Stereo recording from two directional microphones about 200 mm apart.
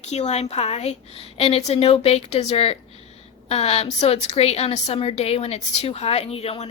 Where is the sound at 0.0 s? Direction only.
35° left (ahead or behind).